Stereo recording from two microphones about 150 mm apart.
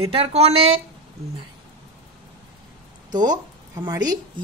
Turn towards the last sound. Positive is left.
turn(degrees=-25)  # may be behind; listen again after turning